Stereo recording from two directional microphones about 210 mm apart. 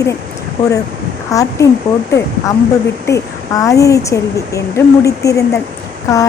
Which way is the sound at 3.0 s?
15° left (ahead or behind).